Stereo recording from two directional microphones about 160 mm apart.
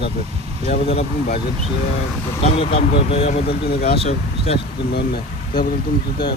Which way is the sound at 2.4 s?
35° left (ahead or behind).